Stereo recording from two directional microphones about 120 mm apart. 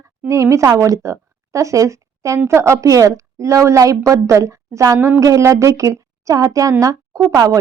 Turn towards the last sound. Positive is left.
turn(degrees=-30)  # may be behind; listen again after turning